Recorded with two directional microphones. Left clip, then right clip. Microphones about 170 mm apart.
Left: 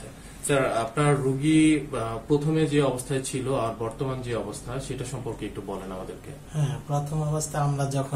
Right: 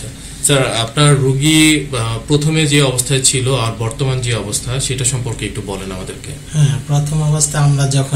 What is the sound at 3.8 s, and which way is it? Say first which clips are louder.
Speech: right 9 dB; 45° right (ahead or behind).